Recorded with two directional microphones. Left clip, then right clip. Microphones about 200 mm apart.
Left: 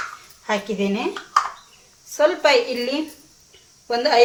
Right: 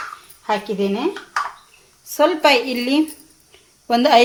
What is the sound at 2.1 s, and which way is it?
Speech, 50° right (ahead or behind).